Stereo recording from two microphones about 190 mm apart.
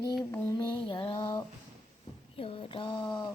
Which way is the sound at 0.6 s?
25° left (ahead or behind).